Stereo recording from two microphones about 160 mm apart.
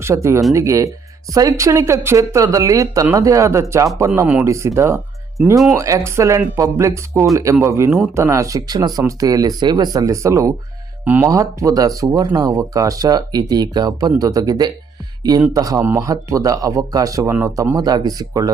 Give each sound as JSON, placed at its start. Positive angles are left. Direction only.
{"t": 0.0, "sound": "speech", "side_deg": -15}